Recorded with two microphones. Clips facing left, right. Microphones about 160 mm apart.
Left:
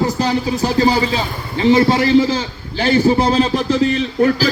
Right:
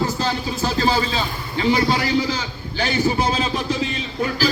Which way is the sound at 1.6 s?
25° left (ahead or behind).